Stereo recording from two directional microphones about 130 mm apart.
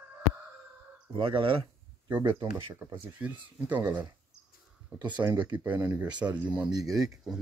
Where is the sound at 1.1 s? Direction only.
40° right (ahead or behind).